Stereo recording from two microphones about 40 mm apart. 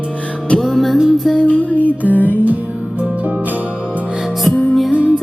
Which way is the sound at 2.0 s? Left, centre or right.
Left.